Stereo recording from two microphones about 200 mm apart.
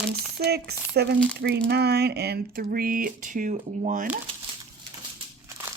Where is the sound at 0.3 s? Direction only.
55° right (ahead or behind).